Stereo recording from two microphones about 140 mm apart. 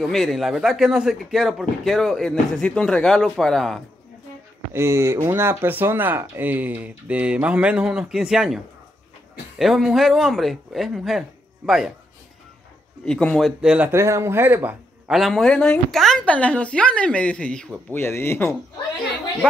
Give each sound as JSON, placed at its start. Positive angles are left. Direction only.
{"t": 0.0, "sound": "a man's voice", "side_deg": 0}
{"t": 4.7, "sound": "speech", "side_deg": -20}
{"t": 9.6, "sound": "a man's voice", "side_deg": -5}
{"t": 13.0, "sound": "a man's voice", "side_deg": 5}
{"t": 13.6, "sound": "speech", "side_deg": -10}
{"t": 15.0, "sound": "a woman's voice", "side_deg": 0}
{"t": 17.9, "sound": "a woman's voice", "side_deg": 15}